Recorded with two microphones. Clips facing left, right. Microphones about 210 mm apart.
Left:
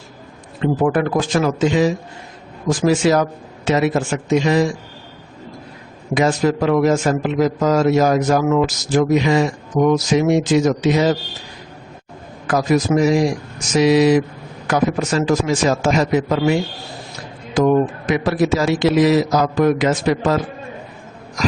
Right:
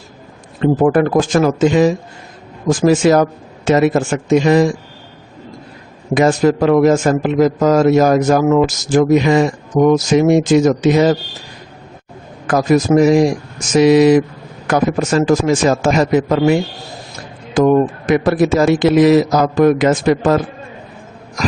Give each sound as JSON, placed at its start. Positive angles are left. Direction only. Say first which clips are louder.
{"t": 0.6, "sound": "a man's voice", "louder": "right 5 dB", "side_deg": -45}
{"t": 6.1, "sound": "a man's voice", "louder": "right 4 dB", "side_deg": -50}
{"t": 12.5, "sound": "a man's voice", "louder": "right 4 dB", "side_deg": -50}
{"t": 18.0, "sound": "a man's voice", "louder": "right 4 dB", "side_deg": -50}